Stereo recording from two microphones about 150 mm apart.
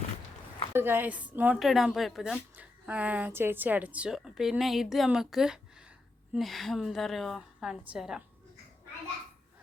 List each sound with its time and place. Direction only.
0.7 s a woman's voice: 15° right (ahead or behind)